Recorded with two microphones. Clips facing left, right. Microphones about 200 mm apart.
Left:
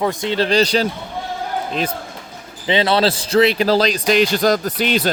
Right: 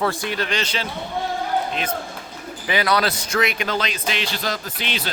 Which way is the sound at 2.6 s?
25° left (ahead or behind).